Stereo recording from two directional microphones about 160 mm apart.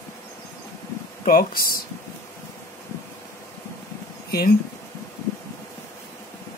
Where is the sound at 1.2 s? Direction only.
65° left (ahead or behind).